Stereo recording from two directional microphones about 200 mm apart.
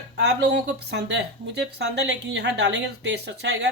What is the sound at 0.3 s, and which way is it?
Speech, 55° right (ahead or behind).